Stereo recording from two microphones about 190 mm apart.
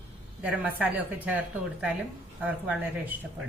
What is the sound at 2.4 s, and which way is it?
A woman's voice, 5° right (ahead or behind).